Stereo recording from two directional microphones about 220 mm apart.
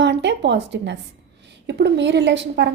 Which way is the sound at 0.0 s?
55° right (ahead or behind).